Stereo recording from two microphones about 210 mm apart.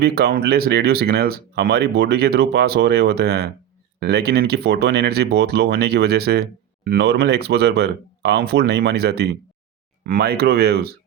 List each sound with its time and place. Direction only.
0.0 s speech: 45° right (ahead or behind)